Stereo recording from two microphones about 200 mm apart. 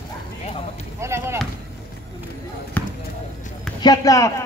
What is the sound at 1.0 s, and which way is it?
Speech, 15° right (ahead or behind).